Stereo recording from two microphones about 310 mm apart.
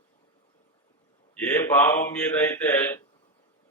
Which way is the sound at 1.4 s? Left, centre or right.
Centre.